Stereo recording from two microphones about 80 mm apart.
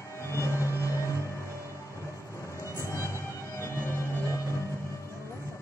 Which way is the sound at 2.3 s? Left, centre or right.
Left.